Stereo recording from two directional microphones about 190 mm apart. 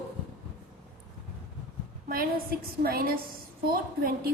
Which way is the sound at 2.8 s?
50° right (ahead or behind).